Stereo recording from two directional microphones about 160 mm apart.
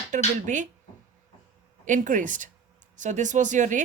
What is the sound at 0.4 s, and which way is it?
Speech, 50° right (ahead or behind).